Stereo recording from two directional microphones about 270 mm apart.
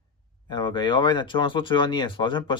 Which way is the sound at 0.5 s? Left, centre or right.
Centre.